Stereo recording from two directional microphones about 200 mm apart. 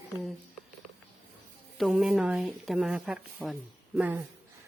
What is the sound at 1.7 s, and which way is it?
Speech, centre (ahead or behind).